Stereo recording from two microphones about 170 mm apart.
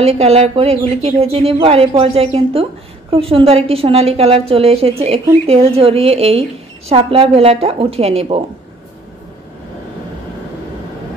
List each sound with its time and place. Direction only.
0.0 s a woman's voice: 35° right (ahead or behind)